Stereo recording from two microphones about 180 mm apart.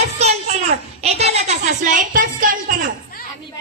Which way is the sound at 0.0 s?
35° right (ahead or behind).